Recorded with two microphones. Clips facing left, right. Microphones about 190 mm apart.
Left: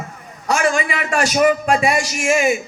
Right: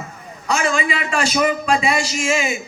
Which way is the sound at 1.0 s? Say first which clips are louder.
Left 5 dB; 50° left (ahead or behind).